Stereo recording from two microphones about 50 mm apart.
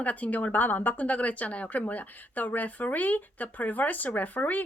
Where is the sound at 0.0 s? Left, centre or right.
Left.